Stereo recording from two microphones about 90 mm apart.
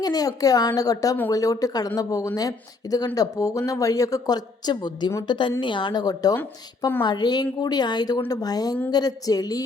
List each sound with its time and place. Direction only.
0.0 s a woman's voice: 45° left (ahead or behind)
5.3 s a woman's voice: 65° left (ahead or behind); by 9.6 s 45° left (ahead or behind)